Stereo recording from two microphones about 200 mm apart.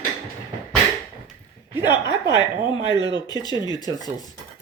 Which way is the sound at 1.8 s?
20° left (ahead or behind).